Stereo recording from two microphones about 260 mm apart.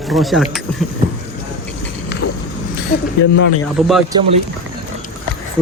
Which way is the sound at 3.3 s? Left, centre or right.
Left.